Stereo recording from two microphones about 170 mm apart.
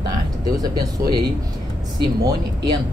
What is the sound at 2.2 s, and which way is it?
Speech, 25° right (ahead or behind).